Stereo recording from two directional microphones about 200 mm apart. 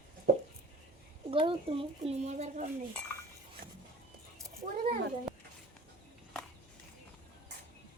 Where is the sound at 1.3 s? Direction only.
25° right (ahead or behind).